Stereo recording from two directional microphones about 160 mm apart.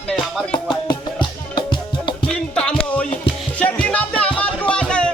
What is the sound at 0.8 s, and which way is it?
Music, 25° left (ahead or behind).